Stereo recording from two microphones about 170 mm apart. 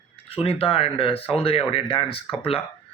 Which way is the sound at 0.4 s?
35° left (ahead or behind).